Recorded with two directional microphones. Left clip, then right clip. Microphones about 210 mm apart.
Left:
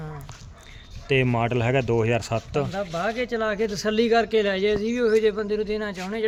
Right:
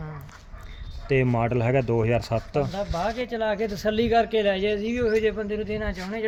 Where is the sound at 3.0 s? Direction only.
25° left (ahead or behind).